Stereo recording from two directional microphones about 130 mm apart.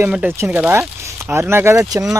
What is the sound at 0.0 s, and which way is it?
Speech, 15° right (ahead or behind).